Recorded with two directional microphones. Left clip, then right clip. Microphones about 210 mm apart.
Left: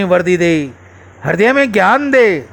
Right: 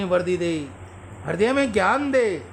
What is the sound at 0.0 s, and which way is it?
A man's voice, 30° left (ahead or behind).